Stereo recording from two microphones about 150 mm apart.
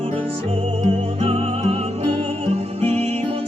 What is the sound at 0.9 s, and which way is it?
Music, 40° right (ahead or behind).